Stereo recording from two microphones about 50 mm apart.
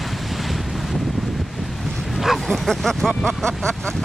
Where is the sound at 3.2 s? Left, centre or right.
Centre.